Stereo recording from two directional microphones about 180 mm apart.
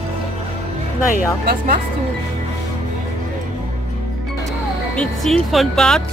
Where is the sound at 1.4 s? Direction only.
50° right (ahead or behind).